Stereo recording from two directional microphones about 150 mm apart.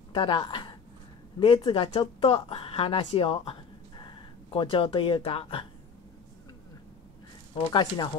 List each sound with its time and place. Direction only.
0.1 s speech: 35° left (ahead or behind)
7.5 s speech: 30° left (ahead or behind)